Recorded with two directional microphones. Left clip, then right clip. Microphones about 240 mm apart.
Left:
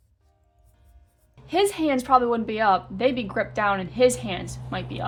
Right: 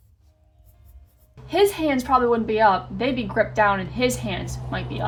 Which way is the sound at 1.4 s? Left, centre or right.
Left.